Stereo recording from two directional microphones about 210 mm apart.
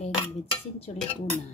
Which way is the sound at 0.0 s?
25° left (ahead or behind).